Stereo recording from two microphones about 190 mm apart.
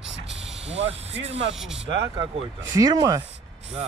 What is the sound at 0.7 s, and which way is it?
Speech, 35° right (ahead or behind).